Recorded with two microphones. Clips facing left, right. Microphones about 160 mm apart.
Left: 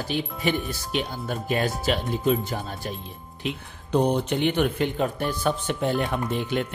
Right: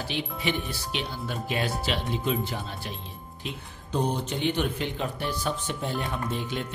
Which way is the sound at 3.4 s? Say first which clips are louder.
Left 7 dB; 60° left (ahead or behind).